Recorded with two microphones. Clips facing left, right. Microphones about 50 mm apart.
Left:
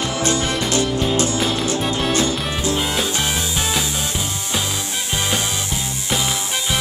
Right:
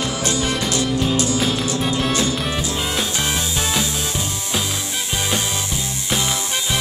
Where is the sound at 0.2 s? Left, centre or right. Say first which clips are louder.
Left 3 dB; left.